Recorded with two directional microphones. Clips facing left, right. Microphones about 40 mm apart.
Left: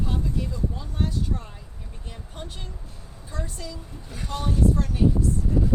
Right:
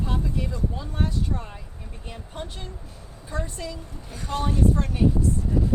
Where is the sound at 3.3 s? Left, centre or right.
Centre.